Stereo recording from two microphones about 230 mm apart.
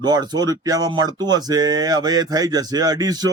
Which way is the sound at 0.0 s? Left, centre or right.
Centre.